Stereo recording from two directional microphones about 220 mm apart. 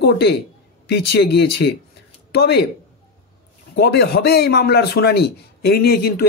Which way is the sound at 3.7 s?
45° left (ahead or behind).